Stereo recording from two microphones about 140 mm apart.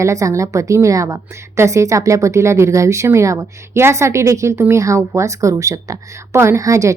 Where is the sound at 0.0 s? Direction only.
20° right (ahead or behind).